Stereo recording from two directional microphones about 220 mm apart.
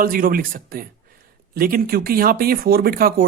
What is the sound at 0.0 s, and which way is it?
A man's voice, 40° right (ahead or behind).